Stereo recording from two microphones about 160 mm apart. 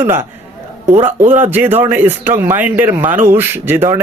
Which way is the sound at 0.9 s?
45° right (ahead or behind).